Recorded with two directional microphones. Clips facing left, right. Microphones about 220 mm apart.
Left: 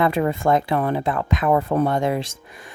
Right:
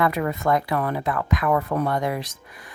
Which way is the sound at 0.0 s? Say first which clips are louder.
Left 3 dB; 30° left (ahead or behind).